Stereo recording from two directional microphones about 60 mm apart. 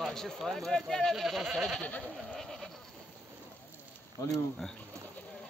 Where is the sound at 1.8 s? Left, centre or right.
Left.